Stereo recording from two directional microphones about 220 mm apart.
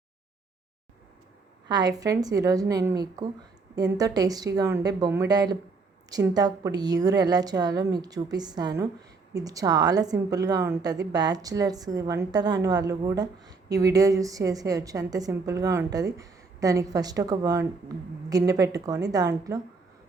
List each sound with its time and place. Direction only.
1.6 s a woman's voice: 20° right (ahead or behind)
3.9 s a woman's voice: 15° right (ahead or behind)